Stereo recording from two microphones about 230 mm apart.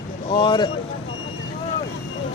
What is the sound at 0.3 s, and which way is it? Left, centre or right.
Speech, left.